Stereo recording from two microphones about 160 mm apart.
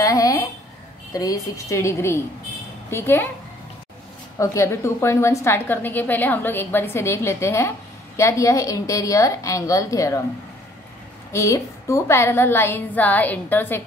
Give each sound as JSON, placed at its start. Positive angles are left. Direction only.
{"t": 0.0, "sound": "a sound", "side_deg": 20}
{"t": 1.1, "sound": "a woman's voice", "side_deg": 20}
{"t": 4.4, "sound": "a woman's voice", "side_deg": 15}
{"t": 11.3, "sound": "a woman's voice", "side_deg": 20}